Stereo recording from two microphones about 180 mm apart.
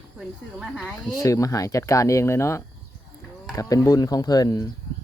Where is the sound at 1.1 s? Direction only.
20° left (ahead or behind).